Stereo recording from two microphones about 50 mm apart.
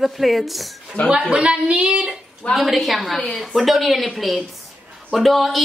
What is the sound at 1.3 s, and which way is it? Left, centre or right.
Speech, right.